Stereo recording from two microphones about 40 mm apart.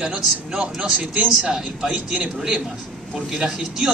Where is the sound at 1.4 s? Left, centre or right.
Centre.